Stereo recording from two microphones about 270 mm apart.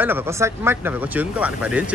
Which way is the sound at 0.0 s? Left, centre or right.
Centre.